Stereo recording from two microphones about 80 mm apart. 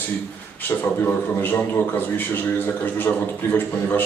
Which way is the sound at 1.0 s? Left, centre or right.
Left.